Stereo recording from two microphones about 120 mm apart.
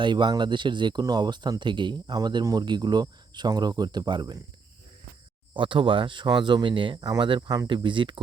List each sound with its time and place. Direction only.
0.0 s speech: 40° right (ahead or behind)
5.5 s speech: 45° right (ahead or behind)